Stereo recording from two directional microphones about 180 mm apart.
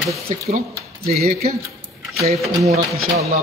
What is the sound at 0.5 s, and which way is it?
Speech, 55° right (ahead or behind).